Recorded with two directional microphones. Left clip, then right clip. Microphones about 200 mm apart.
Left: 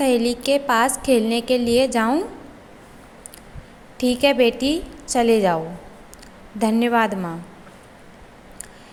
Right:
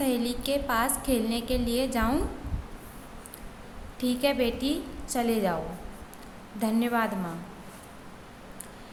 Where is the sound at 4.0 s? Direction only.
35° left (ahead or behind).